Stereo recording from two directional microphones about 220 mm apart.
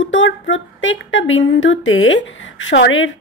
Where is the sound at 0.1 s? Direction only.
60° left (ahead or behind).